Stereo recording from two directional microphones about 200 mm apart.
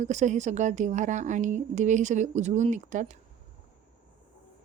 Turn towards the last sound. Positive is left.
turn(degrees=-35)  # may be behind; listen again after turning